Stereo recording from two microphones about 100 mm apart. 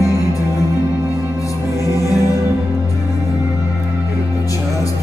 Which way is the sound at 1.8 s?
35° left (ahead or behind).